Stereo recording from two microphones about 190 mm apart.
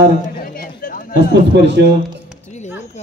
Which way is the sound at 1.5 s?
65° right (ahead or behind).